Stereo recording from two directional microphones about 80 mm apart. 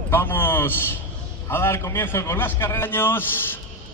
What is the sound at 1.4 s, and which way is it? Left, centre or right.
A man's voice, left.